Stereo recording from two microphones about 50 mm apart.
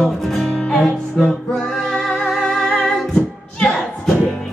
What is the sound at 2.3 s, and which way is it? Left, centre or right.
A capella, centre.